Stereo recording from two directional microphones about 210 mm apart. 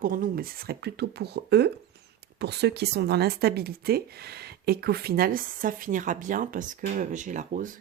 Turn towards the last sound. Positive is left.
turn(degrees=-35)  # may be behind; listen again after turning